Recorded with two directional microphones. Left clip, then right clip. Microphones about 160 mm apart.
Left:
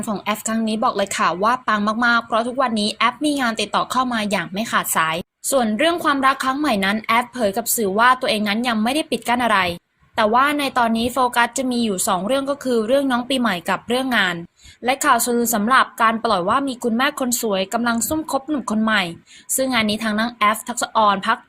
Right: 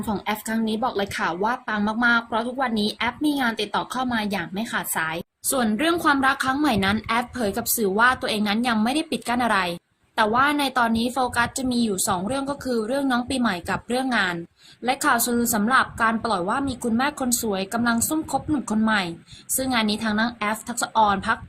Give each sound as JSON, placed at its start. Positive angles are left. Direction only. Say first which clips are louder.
{"t": 0.3, "sound": "a woman's voice", "louder": "left 5 dB", "side_deg": 20}
{"t": 5.5, "sound": "a woman's voice", "louder": "left 5 dB", "side_deg": 10}